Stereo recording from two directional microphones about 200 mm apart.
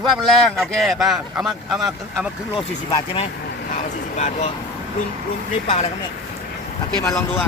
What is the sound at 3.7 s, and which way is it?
Vehicle, 35° left (ahead or behind).